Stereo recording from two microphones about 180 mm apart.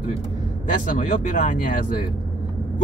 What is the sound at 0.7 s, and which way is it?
Speech, 45° left (ahead or behind).